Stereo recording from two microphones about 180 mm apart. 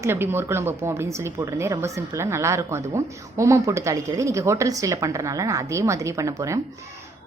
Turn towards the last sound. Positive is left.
turn(degrees=-15)  # may be behind; listen again after turning